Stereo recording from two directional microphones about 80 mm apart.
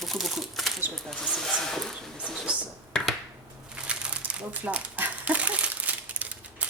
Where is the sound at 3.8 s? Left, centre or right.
Centre.